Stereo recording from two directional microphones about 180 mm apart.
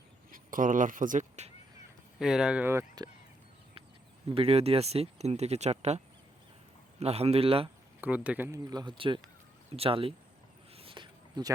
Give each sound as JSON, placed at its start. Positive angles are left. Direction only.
{"t": 0.3, "sound": "speech", "side_deg": -50}
{"t": 2.1, "sound": "speech", "side_deg": -5}
{"t": 4.3, "sound": "speech", "side_deg": -30}
{"t": 7.0, "sound": "speech", "side_deg": -35}
{"t": 8.0, "sound": "speech", "side_deg": -10}
{"t": 10.8, "sound": "a sound", "side_deg": -30}